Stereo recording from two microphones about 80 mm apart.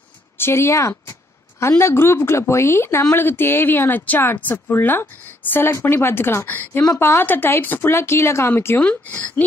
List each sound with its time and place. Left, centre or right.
0.4 s a woman's voice: left